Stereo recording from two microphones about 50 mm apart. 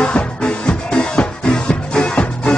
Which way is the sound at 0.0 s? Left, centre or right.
Centre.